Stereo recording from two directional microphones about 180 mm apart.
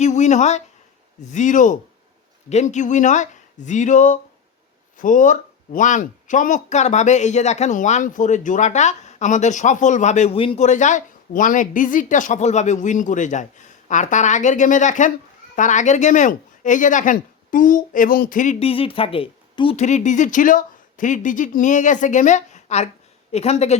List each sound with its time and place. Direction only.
0.0 s a woman's voice: 40° left (ahead or behind)
18.6 s a woman's voice: 30° left (ahead or behind)